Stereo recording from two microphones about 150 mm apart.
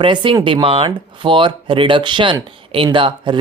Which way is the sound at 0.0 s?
35° right (ahead or behind).